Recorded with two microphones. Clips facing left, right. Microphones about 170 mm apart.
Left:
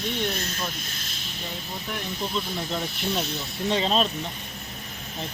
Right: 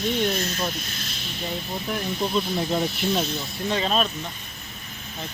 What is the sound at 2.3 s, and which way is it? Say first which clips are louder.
Speech: right 6 dB; 20° right (ahead or behind).